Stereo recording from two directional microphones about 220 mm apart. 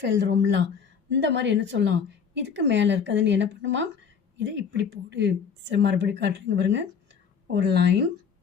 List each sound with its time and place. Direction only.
0.0 s a woman's voice: 50° right (ahead or behind)